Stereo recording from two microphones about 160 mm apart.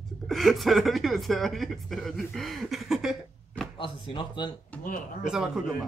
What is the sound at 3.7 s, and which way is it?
Speech, 30° left (ahead or behind).